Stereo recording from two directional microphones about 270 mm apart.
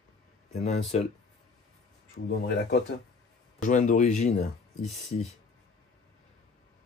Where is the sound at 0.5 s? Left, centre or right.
Left.